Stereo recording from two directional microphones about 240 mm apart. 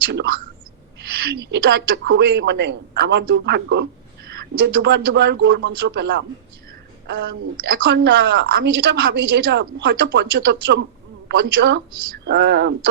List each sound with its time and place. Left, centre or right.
1.2 s a woman's voice: right
7.3 s a woman's voice: right